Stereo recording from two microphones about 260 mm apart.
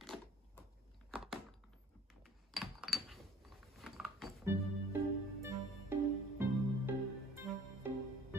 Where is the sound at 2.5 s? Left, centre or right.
Centre.